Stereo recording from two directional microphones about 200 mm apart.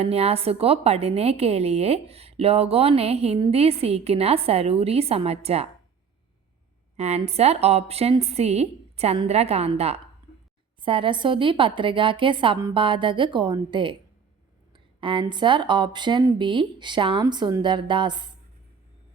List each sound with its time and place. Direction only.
0.0 s a woman's voice: 30° right (ahead or behind)
6.9 s a woman's voice: 35° right (ahead or behind)